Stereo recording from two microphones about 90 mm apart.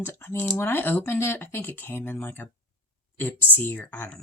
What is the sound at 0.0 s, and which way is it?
Speech, 25° left (ahead or behind).